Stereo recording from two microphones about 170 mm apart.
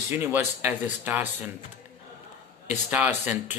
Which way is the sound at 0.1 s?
10° right (ahead or behind).